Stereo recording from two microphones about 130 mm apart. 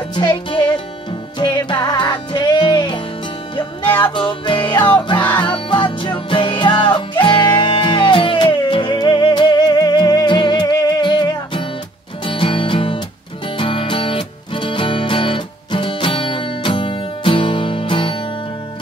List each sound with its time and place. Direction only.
0.1 s music: 35° left (ahead or behind)
4.1 s music: 40° left (ahead or behind)